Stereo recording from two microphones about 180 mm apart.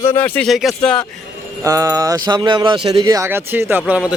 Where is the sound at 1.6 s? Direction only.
20° right (ahead or behind).